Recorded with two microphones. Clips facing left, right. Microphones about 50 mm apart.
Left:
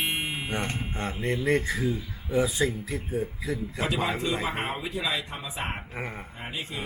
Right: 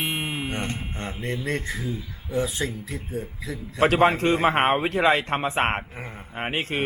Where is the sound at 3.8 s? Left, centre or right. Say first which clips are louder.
Right 11 dB; right.